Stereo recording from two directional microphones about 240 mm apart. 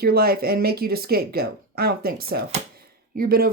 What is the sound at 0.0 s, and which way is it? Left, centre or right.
Speech, right.